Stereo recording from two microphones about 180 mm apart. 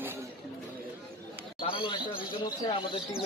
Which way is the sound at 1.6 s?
30° left (ahead or behind).